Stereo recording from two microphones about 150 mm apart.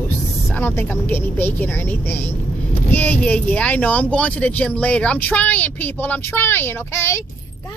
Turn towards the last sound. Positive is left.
turn(degrees=15)  # may be behind; listen again after turning